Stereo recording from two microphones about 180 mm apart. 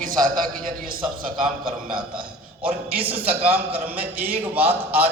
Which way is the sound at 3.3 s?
10° right (ahead or behind).